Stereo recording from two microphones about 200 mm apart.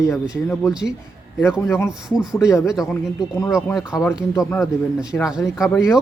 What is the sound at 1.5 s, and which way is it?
Speech, 10° left (ahead or behind).